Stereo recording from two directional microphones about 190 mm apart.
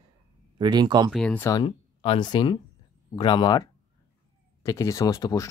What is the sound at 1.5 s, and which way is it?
Speech, 25° left (ahead or behind).